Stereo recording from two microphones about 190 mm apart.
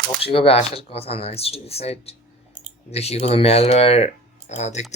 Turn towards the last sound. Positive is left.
turn(degrees=35)  # may be behind; listen again after turning